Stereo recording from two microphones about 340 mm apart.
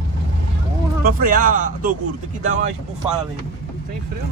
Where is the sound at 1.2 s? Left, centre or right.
Right.